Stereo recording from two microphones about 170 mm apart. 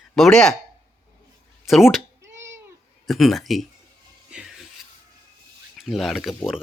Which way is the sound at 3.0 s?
Centre (ahead or behind).